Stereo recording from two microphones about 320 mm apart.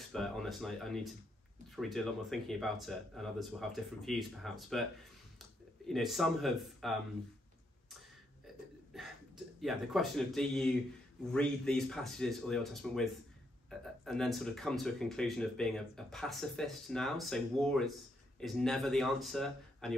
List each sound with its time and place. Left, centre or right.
0.1 s speech: centre
5.9 s speech: centre
9.6 s speech: centre